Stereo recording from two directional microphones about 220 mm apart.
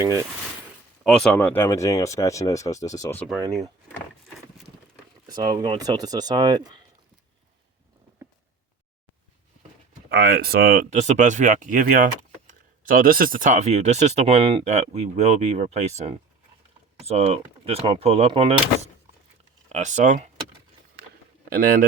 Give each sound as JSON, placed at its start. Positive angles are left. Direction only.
{"t": 0.0, "sound": "speech", "side_deg": -15}
{"t": 1.0, "sound": "speech", "side_deg": 5}
{"t": 5.3, "sound": "speech", "side_deg": -20}
{"t": 10.1, "sound": "speech", "side_deg": -45}
{"t": 17.1, "sound": "speech", "side_deg": -25}
{"t": 21.5, "sound": "speech", "side_deg": -40}